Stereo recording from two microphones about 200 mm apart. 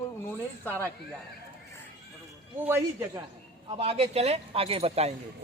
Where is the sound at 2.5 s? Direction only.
10° right (ahead or behind).